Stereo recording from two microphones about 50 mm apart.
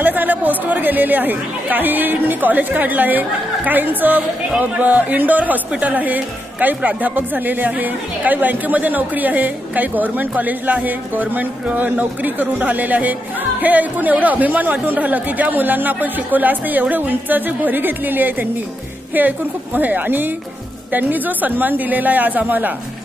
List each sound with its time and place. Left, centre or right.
0.0 s speech: right